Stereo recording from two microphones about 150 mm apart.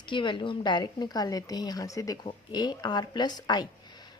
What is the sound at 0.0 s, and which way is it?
A woman's voice, 30° left (ahead or behind).